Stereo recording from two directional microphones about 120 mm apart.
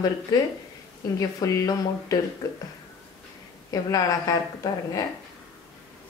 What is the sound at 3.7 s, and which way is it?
Speech, 30° left (ahead or behind).